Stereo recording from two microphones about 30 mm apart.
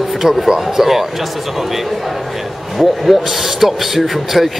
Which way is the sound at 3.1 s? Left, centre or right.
Centre.